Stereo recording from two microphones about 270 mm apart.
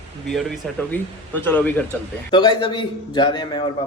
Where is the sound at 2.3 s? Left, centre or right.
Centre.